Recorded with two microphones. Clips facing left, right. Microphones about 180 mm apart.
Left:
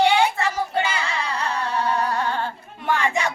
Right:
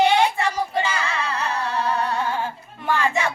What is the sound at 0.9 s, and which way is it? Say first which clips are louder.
Singing: right 1 dB; 10° left (ahead or behind).